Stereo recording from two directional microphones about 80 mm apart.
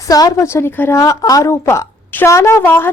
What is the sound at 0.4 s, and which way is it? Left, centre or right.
A woman's voice, left.